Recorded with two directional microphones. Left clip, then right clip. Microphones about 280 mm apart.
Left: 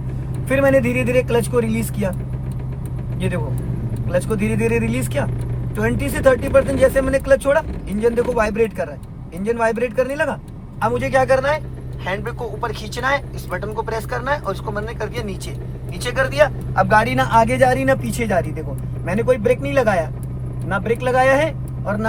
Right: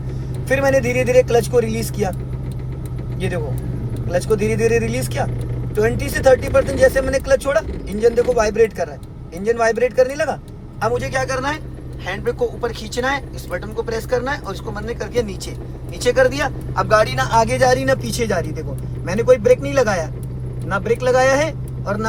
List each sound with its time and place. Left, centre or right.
0.4 s speech: centre
4.1 s speech: centre